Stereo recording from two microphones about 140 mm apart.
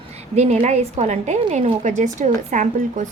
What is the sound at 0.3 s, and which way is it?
A woman's voice, 55° right (ahead or behind).